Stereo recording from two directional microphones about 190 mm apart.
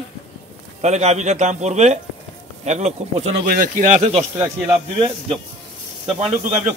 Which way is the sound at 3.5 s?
45° right (ahead or behind).